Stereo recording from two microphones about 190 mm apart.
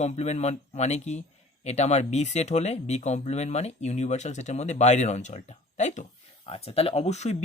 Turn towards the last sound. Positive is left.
turn(degrees=35)  # may be behind; listen again after turning